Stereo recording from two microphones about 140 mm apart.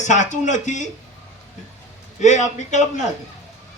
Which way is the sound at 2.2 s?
55° left (ahead or behind).